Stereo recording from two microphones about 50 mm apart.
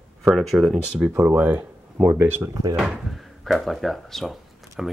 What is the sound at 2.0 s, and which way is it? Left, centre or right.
Speech, right.